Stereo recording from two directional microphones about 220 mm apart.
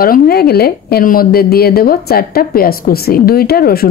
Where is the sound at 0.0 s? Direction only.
45° left (ahead or behind).